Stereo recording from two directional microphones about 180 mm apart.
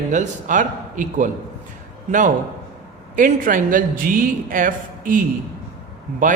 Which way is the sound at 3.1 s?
50° right (ahead or behind).